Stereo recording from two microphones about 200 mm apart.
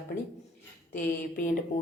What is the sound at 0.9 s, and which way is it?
Speech, 40° left (ahead or behind).